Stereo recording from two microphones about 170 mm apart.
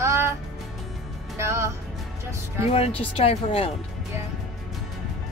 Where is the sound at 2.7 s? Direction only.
35° left (ahead or behind).